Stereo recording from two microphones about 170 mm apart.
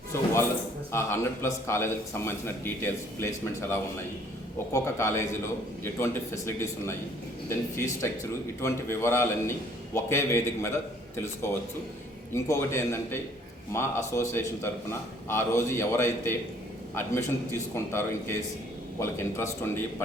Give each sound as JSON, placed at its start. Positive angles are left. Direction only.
{"t": 0.9, "sound": "a man's voice", "side_deg": 15}
{"t": 12.3, "sound": "a man's voice", "side_deg": 15}